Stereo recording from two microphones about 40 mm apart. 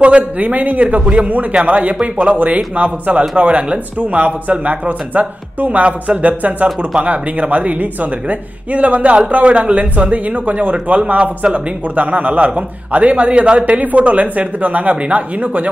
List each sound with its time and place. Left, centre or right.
0.0 s a woman's voice: right
1.0 s speech: right
2.3 s a woman's voice: right